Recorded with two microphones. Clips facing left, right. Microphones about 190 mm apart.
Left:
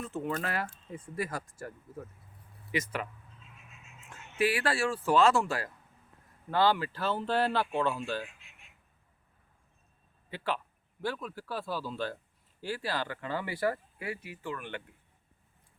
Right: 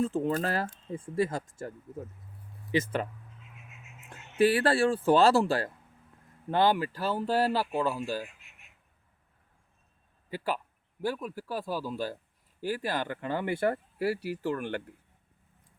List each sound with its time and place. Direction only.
0.0 s speech: 30° right (ahead or behind)
4.1 s speech: 30° right (ahead or behind)
6.5 s speech: 20° right (ahead or behind)
11.0 s speech: 10° right (ahead or behind)
14.2 s speech: 40° right (ahead or behind)